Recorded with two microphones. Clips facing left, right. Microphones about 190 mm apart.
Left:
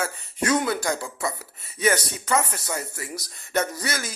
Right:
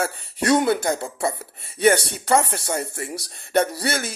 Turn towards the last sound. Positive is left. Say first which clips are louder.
# right 5 dB
turn(degrees=-30)  # may be behind; listen again after turning